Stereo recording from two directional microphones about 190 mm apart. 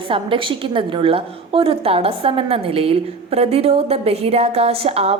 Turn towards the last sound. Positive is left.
turn(degrees=-35)  # may be behind; listen again after turning